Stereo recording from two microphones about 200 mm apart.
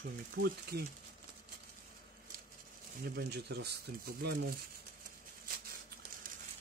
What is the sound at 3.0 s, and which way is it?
Speech, 55° right (ahead or behind).